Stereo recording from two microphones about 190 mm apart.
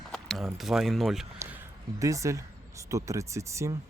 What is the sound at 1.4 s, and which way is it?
Speech, 10° right (ahead or behind).